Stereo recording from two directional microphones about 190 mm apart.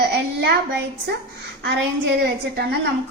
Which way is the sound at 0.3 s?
60° right (ahead or behind).